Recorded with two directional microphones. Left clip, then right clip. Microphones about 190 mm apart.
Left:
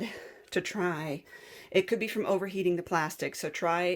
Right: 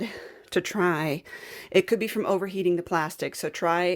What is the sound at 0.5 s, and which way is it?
Speech, 35° right (ahead or behind).